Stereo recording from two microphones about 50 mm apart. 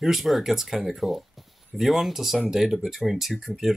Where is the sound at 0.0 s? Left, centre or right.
Centre.